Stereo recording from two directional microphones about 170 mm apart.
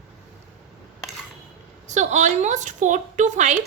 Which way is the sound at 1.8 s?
45° right (ahead or behind).